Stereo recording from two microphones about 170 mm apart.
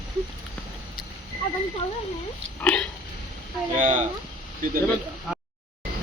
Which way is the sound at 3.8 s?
50° right (ahead or behind).